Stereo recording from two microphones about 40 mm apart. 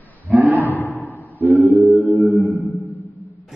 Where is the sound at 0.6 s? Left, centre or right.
Left.